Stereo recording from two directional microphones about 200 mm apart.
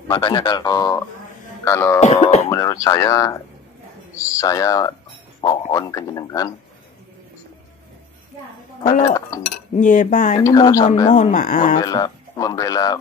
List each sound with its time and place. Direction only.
0.1 s speech: 25° left (ahead or behind)
1.6 s music: 10° left (ahead or behind)
2.0 s speech: 30° left (ahead or behind)
2.5 s speech: 15° left (ahead or behind)
9.0 s speech: 20° left (ahead or behind)
9.8 s speech: 40° left (ahead or behind)
10.4 s speech: 15° left (ahead or behind)
11.1 s speech: 35° left (ahead or behind)
11.8 s speech: 20° left (ahead or behind)